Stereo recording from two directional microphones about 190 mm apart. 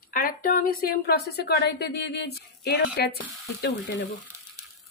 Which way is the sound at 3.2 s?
70° left (ahead or behind).